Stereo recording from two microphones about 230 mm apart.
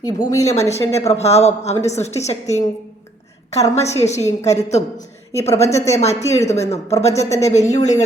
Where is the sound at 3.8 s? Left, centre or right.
Left.